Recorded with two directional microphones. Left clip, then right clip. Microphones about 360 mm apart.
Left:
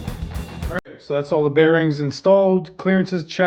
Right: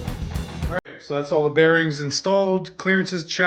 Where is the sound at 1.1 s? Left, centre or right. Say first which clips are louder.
Left 4 dB; left.